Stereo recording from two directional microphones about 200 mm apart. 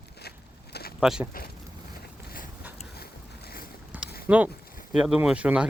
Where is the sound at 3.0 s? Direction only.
50° left (ahead or behind).